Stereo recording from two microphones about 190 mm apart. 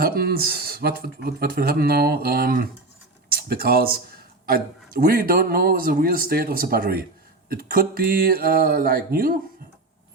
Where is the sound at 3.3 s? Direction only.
50° right (ahead or behind).